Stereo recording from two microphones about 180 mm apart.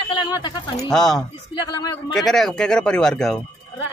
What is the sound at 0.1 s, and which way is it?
Speech, 25° left (ahead or behind).